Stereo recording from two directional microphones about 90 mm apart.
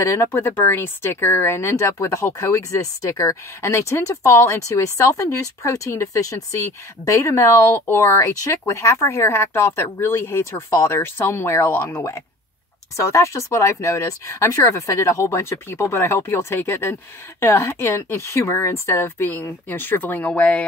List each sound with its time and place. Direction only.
0.0 s speech: 30° left (ahead or behind); by 20.6 s 15° left (ahead or behind)